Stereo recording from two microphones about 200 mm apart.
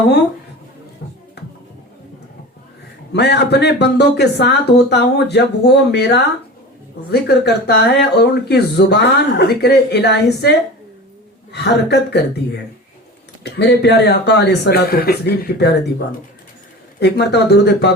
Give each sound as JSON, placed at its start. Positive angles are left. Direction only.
{"t": 3.1, "sound": "speech", "side_deg": 55}
{"t": 11.5, "sound": "speech", "side_deg": 55}
{"t": 13.4, "sound": "speech", "side_deg": 60}
{"t": 17.0, "sound": "speech", "side_deg": 55}